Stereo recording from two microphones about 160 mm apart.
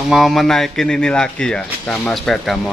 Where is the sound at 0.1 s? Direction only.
Centre (ahead or behind).